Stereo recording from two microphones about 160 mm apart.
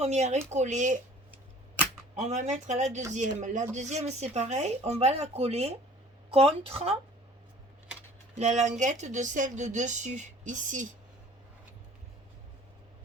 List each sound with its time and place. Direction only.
0.0 s speech: 45° right (ahead or behind)
2.1 s speech: 45° right (ahead or behind)
8.4 s speech: 45° right (ahead or behind)